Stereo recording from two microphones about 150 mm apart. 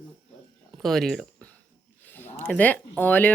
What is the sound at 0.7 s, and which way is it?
Speech, centre (ahead or behind).